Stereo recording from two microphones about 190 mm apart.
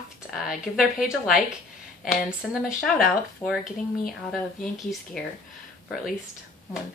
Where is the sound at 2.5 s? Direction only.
5° right (ahead or behind).